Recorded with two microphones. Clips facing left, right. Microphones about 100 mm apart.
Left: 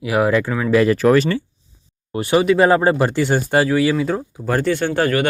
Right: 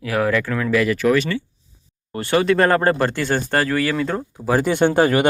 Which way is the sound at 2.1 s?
15° left (ahead or behind).